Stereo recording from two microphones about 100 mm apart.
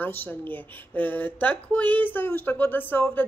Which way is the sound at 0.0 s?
20° left (ahead or behind).